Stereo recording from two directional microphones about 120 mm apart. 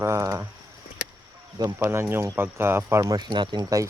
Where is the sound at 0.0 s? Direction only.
25° right (ahead or behind).